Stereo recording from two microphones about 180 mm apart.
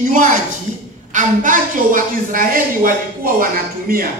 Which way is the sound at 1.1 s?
45° right (ahead or behind).